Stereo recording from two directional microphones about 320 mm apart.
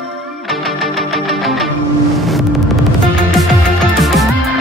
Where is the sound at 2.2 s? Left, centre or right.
Centre.